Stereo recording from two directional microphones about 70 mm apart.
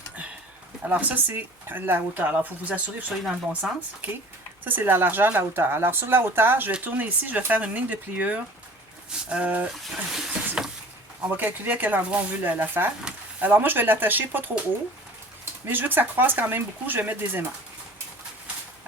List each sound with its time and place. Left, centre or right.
0.9 s speech: right
9.8 s speech: centre
10.6 s a sound: centre
11.3 s speech: right
15.6 s speech: right